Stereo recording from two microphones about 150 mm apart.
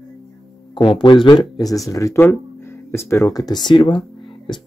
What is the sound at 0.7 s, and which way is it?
Speech, 30° left (ahead or behind).